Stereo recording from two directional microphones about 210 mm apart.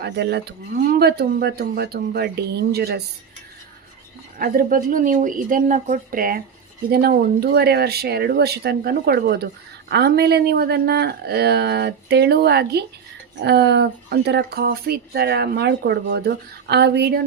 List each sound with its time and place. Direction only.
0.0 s speech: 50° right (ahead or behind)
4.4 s speech: 40° right (ahead or behind)